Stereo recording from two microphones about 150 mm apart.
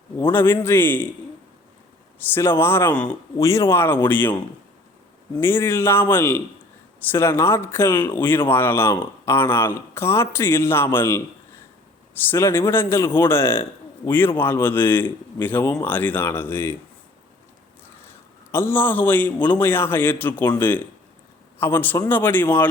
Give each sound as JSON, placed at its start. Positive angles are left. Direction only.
{"t": 0.2, "sound": "speech", "side_deg": 15}
{"t": 2.1, "sound": "speech", "side_deg": 15}
{"t": 3.3, "sound": "speech", "side_deg": 20}
{"t": 5.4, "sound": "speech", "side_deg": 15}
{"t": 18.5, "sound": "speech", "side_deg": 15}